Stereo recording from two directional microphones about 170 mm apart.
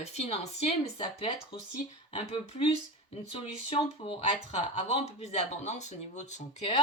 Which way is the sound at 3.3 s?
35° left (ahead or behind).